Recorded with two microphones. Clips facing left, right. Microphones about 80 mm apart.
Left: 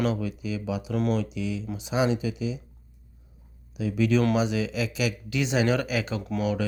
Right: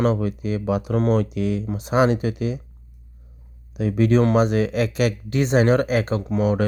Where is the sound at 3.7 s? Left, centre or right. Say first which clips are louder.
Right 5 dB; right.